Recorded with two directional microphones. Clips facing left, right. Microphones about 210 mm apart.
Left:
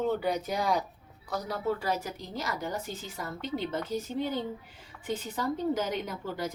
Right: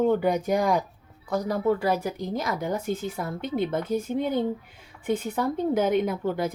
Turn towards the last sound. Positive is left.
turn(degrees=-55)  # may be behind; listen again after turning